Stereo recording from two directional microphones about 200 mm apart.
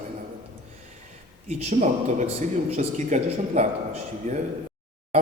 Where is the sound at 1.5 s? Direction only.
35° right (ahead or behind).